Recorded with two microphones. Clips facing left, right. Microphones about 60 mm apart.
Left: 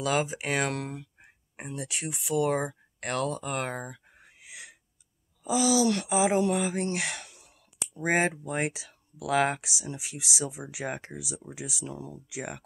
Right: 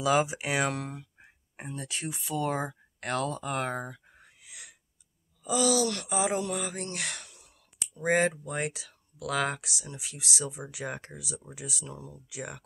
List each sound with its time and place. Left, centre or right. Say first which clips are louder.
0.0 s speech: right 2 dB; centre
4.4 s a sound: left 5 dB; left
5.4 s speech: left 2 dB; centre